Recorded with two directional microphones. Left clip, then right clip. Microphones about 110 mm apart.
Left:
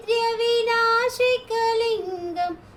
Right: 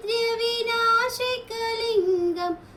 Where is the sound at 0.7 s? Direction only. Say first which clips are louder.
Left 1 dB; 35° left (ahead or behind).